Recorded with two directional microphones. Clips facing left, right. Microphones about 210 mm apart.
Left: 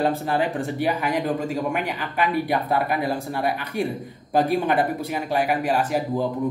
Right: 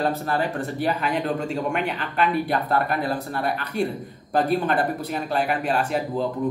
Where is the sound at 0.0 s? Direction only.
15° left (ahead or behind).